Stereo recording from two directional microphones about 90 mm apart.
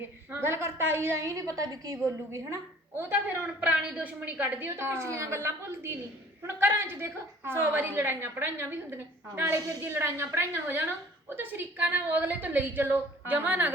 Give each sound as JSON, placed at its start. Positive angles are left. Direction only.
{"t": 0.3, "sound": "a woman's voice", "side_deg": -25}
{"t": 2.3, "sound": "a woman's voice", "side_deg": -30}
{"t": 4.8, "sound": "a woman's voice", "side_deg": -30}